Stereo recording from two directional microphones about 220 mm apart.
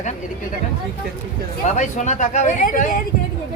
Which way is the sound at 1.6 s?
30° left (ahead or behind).